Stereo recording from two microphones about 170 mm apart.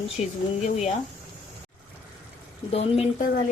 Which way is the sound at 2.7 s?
40° left (ahead or behind).